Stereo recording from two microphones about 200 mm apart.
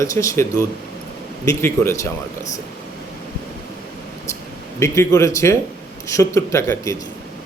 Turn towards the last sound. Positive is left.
turn(degrees=15)  # may be behind; listen again after turning